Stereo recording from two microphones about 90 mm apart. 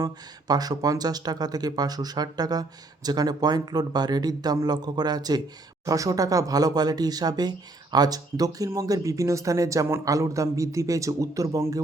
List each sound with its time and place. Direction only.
0.0 s speech: 45° right (ahead or behind)